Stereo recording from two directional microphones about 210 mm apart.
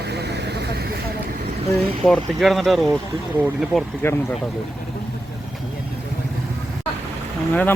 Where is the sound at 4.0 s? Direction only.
10° left (ahead or behind).